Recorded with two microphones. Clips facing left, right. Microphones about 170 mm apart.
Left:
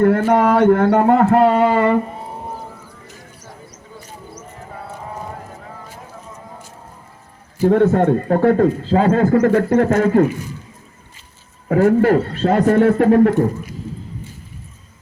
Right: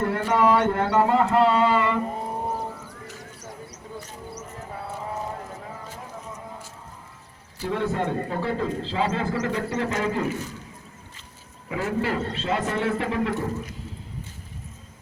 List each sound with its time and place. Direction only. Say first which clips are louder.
0.0 s a man's voice: left 8 dB; 55° left (ahead or behind)
7.6 s a man's voice: left 12 dB; 50° left (ahead or behind)
10.2 s a man's voice: left 5 dB; 10° left (ahead or behind)
11.7 s a man's voice: left 13 dB; 50° left (ahead or behind)